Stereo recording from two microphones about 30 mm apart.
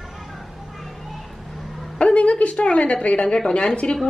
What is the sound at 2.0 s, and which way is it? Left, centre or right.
Speech, left.